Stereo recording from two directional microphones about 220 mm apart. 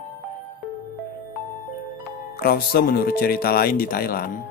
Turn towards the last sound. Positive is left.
turn(degrees=40)  # may be behind; listen again after turning